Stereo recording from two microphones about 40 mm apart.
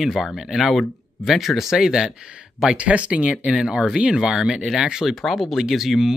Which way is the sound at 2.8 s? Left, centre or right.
Right.